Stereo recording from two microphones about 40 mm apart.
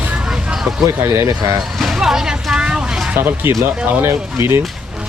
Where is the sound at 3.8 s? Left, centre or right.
Right.